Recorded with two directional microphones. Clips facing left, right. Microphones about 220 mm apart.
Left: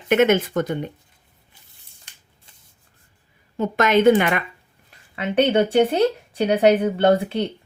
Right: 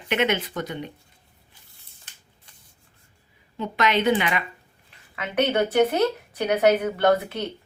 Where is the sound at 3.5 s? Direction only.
45° left (ahead or behind).